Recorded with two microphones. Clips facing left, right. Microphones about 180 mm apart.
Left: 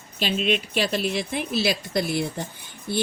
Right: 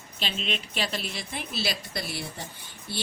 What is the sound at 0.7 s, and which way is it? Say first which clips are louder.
Speech: left 8 dB; 45° left (ahead or behind).